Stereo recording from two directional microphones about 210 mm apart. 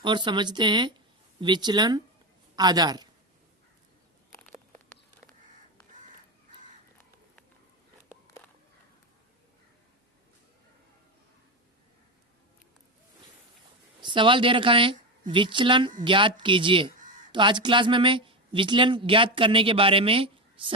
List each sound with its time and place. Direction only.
0.0 s speech: 20° right (ahead or behind)
14.0 s speech: 20° right (ahead or behind)